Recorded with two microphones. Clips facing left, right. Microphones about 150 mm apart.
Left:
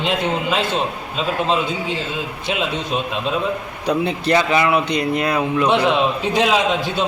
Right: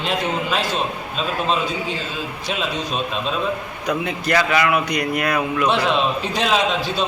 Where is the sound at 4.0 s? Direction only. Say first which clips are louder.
Left 3 dB; 30° left (ahead or behind).